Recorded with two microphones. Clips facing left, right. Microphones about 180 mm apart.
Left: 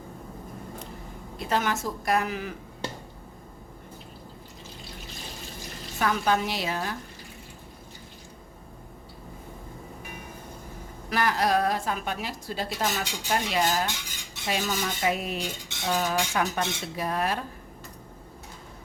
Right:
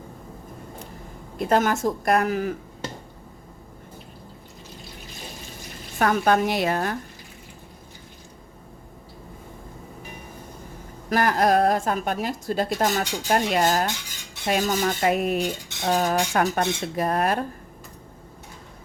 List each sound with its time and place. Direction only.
1.4 s speech: 50° right (ahead or behind)
6.0 s a woman's voice: 55° right (ahead or behind)
11.1 s speech: 50° right (ahead or behind)